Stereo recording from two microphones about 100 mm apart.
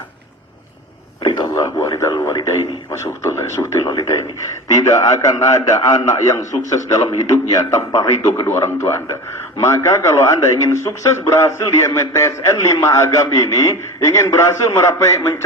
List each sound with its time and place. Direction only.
1.5 s a man's voice: 25° left (ahead or behind)